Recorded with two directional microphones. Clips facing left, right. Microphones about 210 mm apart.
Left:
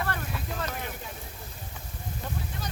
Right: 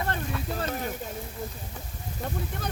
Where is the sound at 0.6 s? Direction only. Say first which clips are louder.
Right 4 dB; 35° right (ahead or behind).